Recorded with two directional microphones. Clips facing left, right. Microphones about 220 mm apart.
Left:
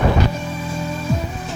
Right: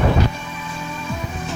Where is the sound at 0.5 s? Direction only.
40° left (ahead or behind).